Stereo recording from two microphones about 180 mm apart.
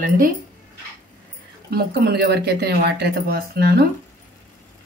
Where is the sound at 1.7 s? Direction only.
60° right (ahead or behind).